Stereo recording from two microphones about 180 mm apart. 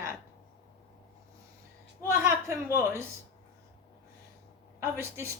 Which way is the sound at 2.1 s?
15° right (ahead or behind).